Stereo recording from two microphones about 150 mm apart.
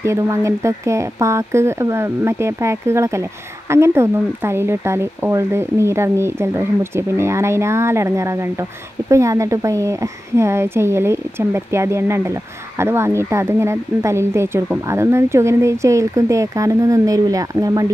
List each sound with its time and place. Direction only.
0.0 s speech: 20° right (ahead or behind)